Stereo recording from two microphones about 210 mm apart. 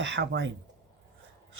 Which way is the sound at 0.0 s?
60° right (ahead or behind).